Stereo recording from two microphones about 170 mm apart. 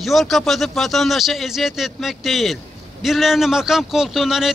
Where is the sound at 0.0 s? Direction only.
Centre (ahead or behind).